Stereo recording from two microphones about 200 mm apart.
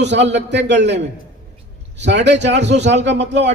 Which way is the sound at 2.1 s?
60° right (ahead or behind).